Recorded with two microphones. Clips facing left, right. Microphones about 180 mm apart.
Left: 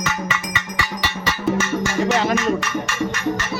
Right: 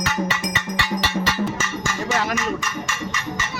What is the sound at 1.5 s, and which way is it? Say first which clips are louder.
Music: left 6 dB; 65° left (ahead or behind).